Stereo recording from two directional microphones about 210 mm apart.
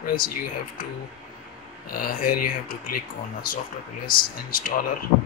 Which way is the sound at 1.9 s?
45° left (ahead or behind).